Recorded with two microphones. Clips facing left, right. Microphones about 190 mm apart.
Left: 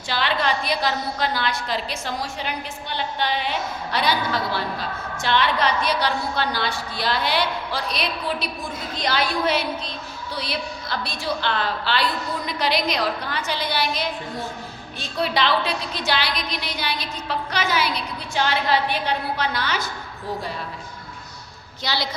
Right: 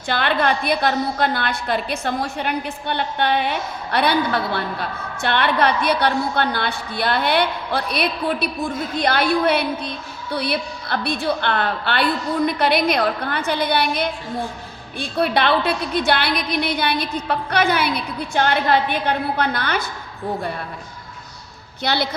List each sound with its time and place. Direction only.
0.1 s a woman's voice: 55° right (ahead or behind)
21.8 s a woman's voice: 55° right (ahead or behind)